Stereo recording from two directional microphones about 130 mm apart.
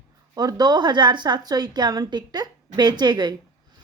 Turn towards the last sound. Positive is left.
turn(degrees=-35)  # may be behind; listen again after turning